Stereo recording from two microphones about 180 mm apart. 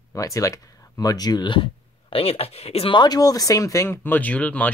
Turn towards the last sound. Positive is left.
turn(degrees=10)  # may be behind; listen again after turning